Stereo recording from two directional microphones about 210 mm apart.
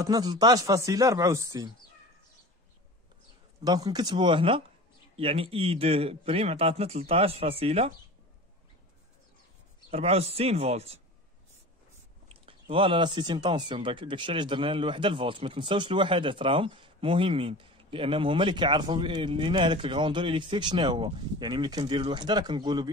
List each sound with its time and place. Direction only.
0.0 s speech: 20° right (ahead or behind)
3.6 s speech: 20° right (ahead or behind)
9.8 s speech: 30° right (ahead or behind)
12.3 s speech: 25° right (ahead or behind)